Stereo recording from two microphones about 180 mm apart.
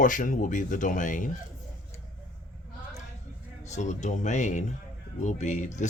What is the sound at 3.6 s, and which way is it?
Speech, 40° left (ahead or behind).